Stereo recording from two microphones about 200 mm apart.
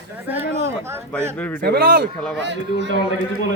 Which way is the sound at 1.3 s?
5° left (ahead or behind).